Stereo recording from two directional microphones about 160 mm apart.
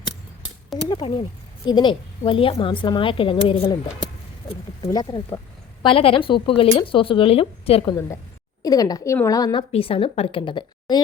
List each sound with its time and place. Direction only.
0.9 s speech: 30° left (ahead or behind)
4.9 s a woman's voice: 25° left (ahead or behind)
5.8 s speech: 35° left (ahead or behind)
8.6 s a woman's voice: 25° left (ahead or behind)